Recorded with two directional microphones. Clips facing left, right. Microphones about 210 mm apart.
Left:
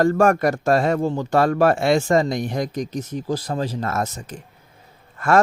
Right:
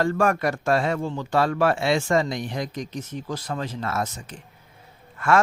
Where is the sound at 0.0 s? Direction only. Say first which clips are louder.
Left 5 dB; 45° left (ahead or behind).